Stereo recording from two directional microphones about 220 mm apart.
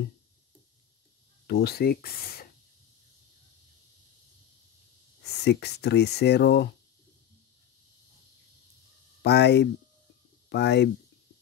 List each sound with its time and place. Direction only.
1.5 s speech: 45° left (ahead or behind)
5.2 s speech: 50° left (ahead or behind)
9.2 s speech: 50° left (ahead or behind)